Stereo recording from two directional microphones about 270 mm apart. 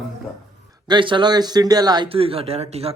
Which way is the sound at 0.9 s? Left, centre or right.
Centre.